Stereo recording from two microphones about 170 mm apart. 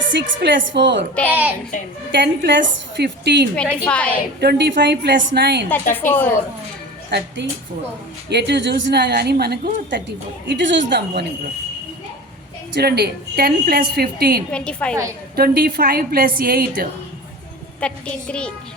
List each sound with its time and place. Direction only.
0.1 s a woman's voice: 90° right
1.1 s a woman's voice: 10° left (ahead or behind)
2.1 s a woman's voice: 90° right
3.8 s a woman's voice: 5° left (ahead or behind)
4.4 s a woman's voice: 80° right
5.9 s a woman's voice: 10° left (ahead or behind)
7.4 s a woman's voice: 90° right; by 10.0 s 70° right (ahead or behind)
10.5 s a woman's voice: 90° right
12.7 s a woman's voice: 70° right (ahead or behind)
14.5 s a woman's voice: 5° left (ahead or behind)
15.4 s a woman's voice: 65° right (ahead or behind)
17.7 s a woman's voice: 5° left (ahead or behind)